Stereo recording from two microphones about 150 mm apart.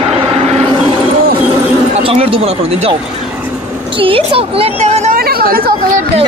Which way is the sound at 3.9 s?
35° right (ahead or behind).